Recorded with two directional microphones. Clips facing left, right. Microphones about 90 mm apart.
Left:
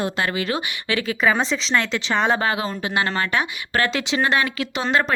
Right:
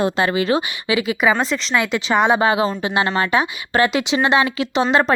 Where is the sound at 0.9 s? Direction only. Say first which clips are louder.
Right 3 dB; 10° right (ahead or behind).